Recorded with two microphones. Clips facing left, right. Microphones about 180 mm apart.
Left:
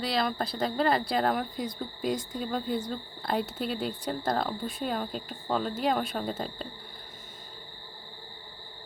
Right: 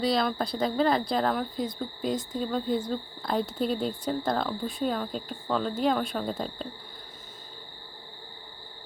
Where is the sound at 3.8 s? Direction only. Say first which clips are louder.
Right 2 dB; 5° left (ahead or behind).